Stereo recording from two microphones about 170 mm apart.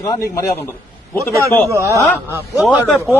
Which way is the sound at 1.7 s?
20° right (ahead or behind).